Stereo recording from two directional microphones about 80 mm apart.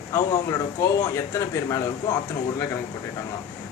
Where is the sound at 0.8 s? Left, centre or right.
Left.